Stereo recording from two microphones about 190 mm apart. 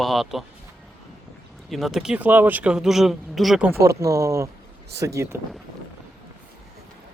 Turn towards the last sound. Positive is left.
turn(degrees=-15)  # may be behind; listen again after turning